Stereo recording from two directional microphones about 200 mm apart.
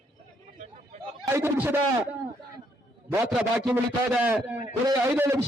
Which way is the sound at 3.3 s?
5° right (ahead or behind).